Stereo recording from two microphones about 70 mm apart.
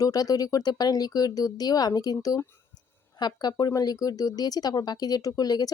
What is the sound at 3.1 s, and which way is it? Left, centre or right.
Speech, left.